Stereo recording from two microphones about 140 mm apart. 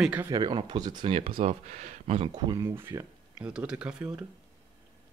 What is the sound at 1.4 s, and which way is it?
Speech, 55° right (ahead or behind).